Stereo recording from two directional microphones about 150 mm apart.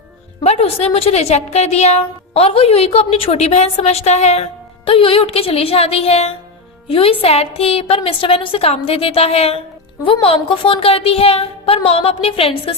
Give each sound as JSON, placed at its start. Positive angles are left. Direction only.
{"t": 0.4, "sound": "a woman's voice", "side_deg": 45}